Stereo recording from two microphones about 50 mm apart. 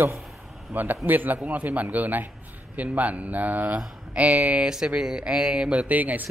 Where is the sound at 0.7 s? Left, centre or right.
Right.